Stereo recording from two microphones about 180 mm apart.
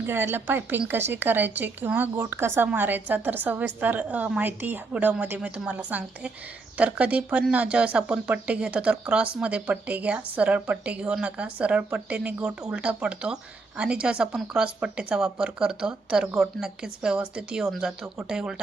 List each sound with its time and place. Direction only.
0.0 s speech: 10° right (ahead or behind)